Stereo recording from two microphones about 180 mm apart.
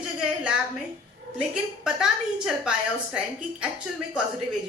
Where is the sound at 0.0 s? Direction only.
5° right (ahead or behind).